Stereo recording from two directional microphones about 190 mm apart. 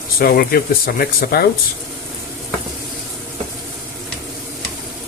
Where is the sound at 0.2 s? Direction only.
55° left (ahead or behind).